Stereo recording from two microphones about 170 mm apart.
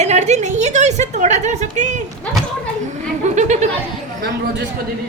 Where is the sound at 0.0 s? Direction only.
40° right (ahead or behind).